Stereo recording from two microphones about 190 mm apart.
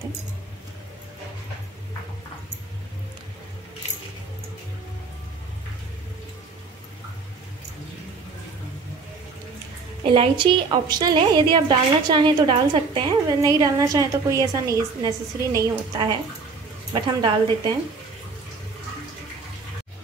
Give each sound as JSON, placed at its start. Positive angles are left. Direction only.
{"t": 10.0, "sound": "a woman's voice", "side_deg": -25}